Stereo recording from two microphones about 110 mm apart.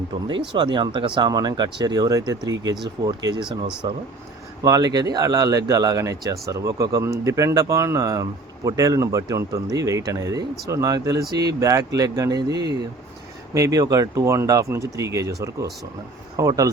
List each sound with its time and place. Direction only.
0.3 s speech: 45° right (ahead or behind)